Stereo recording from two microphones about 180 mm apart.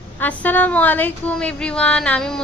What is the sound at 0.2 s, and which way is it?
A woman's voice, 10° left (ahead or behind).